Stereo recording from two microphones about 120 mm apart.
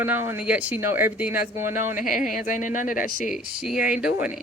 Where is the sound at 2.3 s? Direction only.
90° left.